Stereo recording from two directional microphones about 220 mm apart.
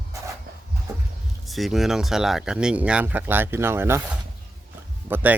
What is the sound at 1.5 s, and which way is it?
Speech, centre (ahead or behind).